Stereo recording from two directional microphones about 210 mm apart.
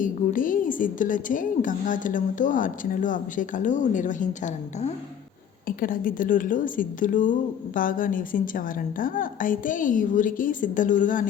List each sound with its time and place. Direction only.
0.0 s a woman's voice: 40° left (ahead or behind)